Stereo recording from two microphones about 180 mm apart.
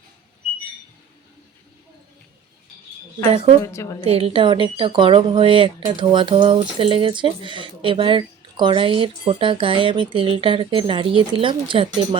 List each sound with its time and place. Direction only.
3.2 s a woman's voice: 35° right (ahead or behind)
3.7 s a woman's voice: 15° left (ahead or behind)
4.0 s speech: 35° right (ahead or behind)